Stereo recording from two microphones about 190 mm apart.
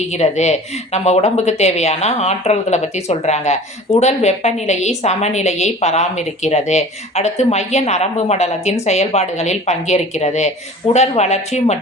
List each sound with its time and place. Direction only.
0.1 s speech: 35° left (ahead or behind)